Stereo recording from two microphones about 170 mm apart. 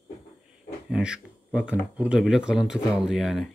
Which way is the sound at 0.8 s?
5° right (ahead or behind).